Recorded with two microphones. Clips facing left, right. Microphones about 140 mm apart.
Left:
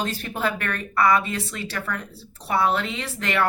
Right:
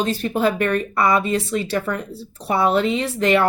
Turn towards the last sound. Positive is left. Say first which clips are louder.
# right 7 dB
turn(degrees=-20)  # may be behind; listen again after turning